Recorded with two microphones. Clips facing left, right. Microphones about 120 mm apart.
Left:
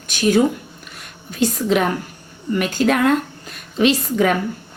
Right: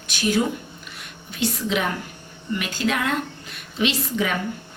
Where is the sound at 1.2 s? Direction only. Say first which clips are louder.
Left 6 dB; 40° left (ahead or behind).